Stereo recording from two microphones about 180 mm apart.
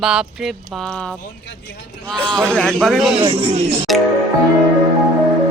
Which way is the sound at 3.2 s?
30° right (ahead or behind).